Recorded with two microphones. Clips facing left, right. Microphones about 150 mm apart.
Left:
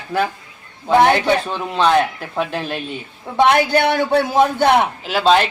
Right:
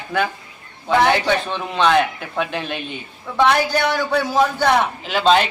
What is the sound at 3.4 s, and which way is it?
Speech, 55° left (ahead or behind).